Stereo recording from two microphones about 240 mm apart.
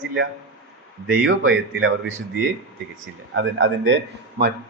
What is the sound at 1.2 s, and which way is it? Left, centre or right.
Speech, right.